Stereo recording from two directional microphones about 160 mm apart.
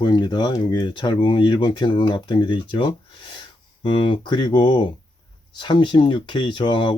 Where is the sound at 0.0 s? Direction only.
30° left (ahead or behind).